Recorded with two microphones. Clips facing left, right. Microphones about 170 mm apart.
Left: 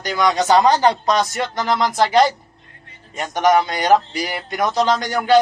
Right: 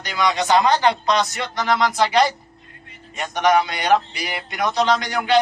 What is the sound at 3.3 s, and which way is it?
A man's voice, 45° left (ahead or behind).